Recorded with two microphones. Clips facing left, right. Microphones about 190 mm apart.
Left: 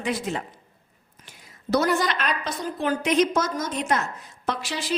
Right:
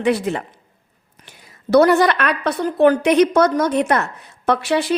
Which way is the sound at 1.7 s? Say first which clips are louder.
Right 10 dB; 65° right (ahead or behind).